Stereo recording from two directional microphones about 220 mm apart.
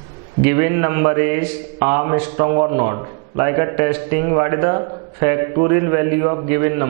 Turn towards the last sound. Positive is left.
turn(degrees=-15)  # may be behind; listen again after turning